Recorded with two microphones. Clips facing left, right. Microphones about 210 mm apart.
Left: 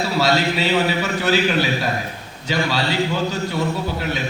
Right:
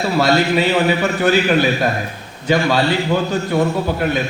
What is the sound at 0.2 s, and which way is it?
A man's voice, 55° right (ahead or behind).